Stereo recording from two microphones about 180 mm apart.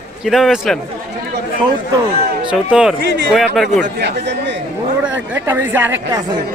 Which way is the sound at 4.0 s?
75° right (ahead or behind).